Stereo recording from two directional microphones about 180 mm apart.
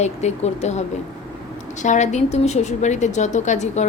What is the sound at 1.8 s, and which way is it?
A woman's voice, 40° left (ahead or behind).